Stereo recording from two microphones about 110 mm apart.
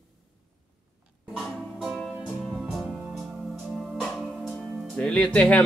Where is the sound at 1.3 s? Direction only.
5° right (ahead or behind).